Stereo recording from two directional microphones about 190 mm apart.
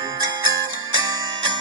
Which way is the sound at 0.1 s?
25° right (ahead or behind).